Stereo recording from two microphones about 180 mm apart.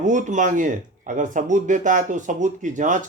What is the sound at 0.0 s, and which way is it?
Speech, 45° right (ahead or behind).